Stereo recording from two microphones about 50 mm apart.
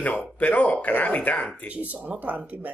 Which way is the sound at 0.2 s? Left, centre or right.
Left.